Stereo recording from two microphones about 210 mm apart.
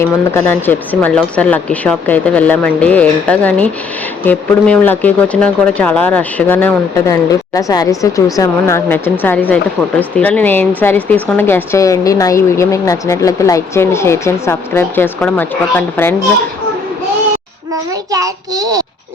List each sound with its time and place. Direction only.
0.0 s speech: 10° left (ahead or behind)
18.1 s a child's voice: 15° right (ahead or behind)